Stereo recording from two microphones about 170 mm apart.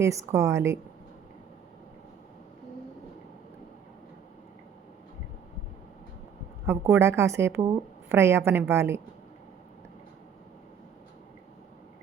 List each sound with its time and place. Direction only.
0.0 s speech: 15° right (ahead or behind)
6.7 s speech: 15° right (ahead or behind)